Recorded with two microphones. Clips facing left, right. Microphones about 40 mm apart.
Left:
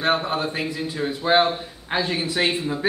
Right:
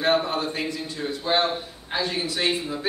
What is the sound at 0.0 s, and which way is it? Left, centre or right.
A man's voice, centre.